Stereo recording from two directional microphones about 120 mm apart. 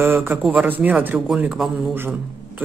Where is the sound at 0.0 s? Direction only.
20° right (ahead or behind).